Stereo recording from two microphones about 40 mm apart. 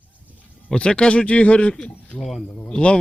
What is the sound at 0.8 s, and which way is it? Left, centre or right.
Speech, left.